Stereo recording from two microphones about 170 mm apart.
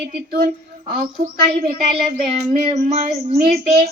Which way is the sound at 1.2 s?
65° right (ahead or behind).